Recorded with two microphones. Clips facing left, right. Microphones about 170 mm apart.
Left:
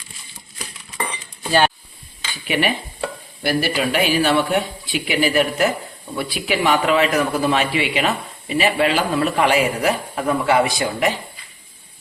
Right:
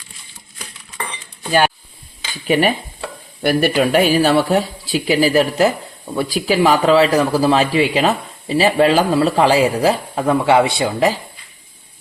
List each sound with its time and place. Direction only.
2.5 s a man's voice: 40° right (ahead or behind)